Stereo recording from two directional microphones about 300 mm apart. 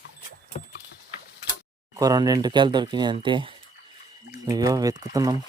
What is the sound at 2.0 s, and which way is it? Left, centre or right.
Speech, centre.